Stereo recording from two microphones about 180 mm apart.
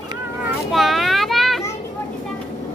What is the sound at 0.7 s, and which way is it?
Children playing, centre (ahead or behind).